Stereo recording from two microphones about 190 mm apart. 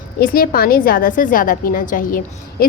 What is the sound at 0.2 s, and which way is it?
A woman's voice, 50° left (ahead or behind).